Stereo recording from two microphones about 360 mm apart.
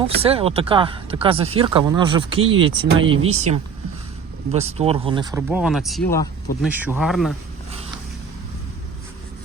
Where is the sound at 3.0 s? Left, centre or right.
Right.